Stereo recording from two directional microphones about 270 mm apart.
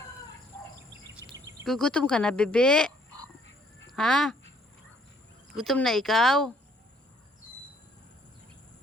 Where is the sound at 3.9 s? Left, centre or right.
Centre.